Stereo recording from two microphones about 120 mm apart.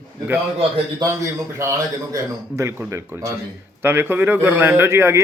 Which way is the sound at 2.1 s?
25° right (ahead or behind).